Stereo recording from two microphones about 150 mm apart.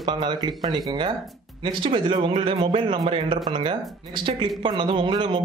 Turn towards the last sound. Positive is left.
turn(degrees=-35)  # may be behind; listen again after turning